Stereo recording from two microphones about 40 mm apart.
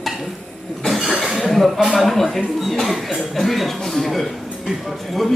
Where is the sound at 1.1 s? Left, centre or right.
Centre.